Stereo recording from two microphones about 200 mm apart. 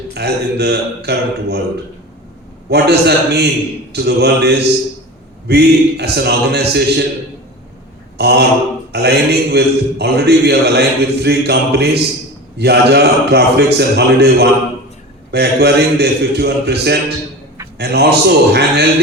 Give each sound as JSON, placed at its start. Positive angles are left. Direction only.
{"t": 0.1, "sound": "a man's voice", "side_deg": -55}
{"t": 2.6, "sound": "a man's voice", "side_deg": -55}
{"t": 8.2, "sound": "a man's voice", "side_deg": -55}